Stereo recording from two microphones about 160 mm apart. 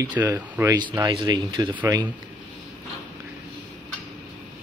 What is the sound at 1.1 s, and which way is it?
Speech, 25° right (ahead or behind).